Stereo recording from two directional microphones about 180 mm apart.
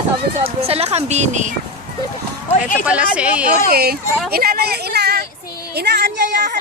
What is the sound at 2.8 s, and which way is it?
Speech, 5° right (ahead or behind).